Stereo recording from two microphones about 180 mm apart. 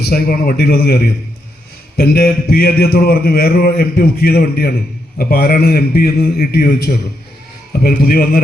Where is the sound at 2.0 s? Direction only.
55° left (ahead or behind).